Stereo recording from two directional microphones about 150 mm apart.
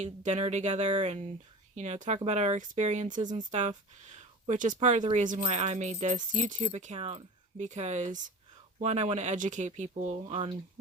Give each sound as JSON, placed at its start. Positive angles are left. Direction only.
{"t": 0.0, "sound": "speech", "side_deg": -50}